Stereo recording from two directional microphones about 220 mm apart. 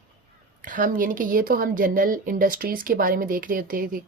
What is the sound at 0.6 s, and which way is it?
A woman's voice, 35° right (ahead or behind).